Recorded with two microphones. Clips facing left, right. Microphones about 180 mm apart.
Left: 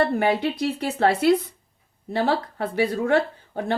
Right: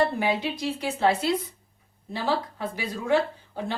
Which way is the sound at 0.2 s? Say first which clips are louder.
Left 5 dB; 60° left (ahead or behind).